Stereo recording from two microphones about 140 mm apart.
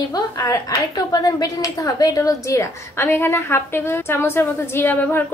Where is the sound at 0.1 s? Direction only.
30° left (ahead or behind).